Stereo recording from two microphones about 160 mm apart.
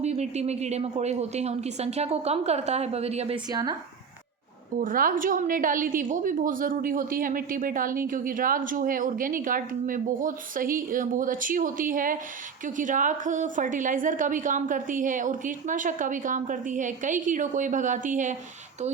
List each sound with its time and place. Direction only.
0.0 s a woman's voice: 45° right (ahead or behind)
3.5 s speech: 25° right (ahead or behind)
4.8 s a woman's voice: 60° right (ahead or behind)